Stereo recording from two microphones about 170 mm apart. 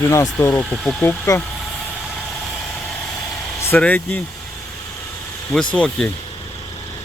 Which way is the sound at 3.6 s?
10° left (ahead or behind).